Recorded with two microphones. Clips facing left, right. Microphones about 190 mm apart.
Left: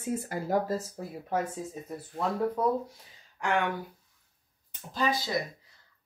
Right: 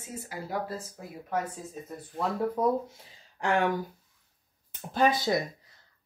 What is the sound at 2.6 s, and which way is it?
Speech, 15° right (ahead or behind).